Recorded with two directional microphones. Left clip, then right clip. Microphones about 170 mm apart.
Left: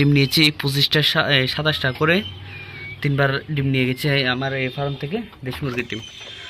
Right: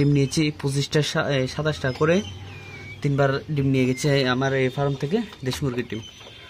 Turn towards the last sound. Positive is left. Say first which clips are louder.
# left 2 dB
turn(degrees=-25)  # may be behind; listen again after turning